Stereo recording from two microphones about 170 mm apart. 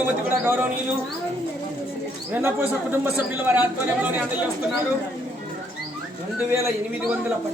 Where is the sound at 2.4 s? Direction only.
10° right (ahead or behind).